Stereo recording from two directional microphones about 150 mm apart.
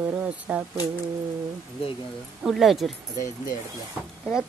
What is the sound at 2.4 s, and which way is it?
Speech, centre (ahead or behind).